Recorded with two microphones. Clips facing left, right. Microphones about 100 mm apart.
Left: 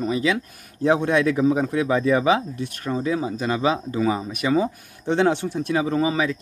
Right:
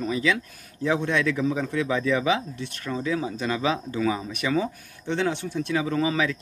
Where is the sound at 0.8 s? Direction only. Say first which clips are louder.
Left 5 dB; 50° left (ahead or behind).